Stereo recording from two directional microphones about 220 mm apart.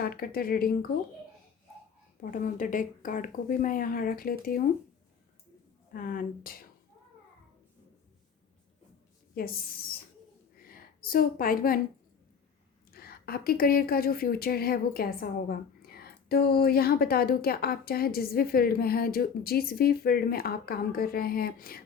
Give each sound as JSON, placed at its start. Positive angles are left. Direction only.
{"t": 0.0, "sound": "a woman's voice", "side_deg": 40}
{"t": 2.2, "sound": "speech", "side_deg": 40}
{"t": 5.9, "sound": "speech", "side_deg": 40}
{"t": 9.3, "sound": "speech", "side_deg": 45}
{"t": 10.6, "sound": "a sound", "side_deg": 40}
{"t": 12.9, "sound": "a woman's voice", "side_deg": 45}